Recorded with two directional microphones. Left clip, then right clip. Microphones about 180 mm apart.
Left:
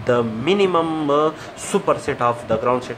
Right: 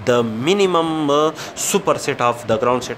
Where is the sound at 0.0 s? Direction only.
55° right (ahead or behind).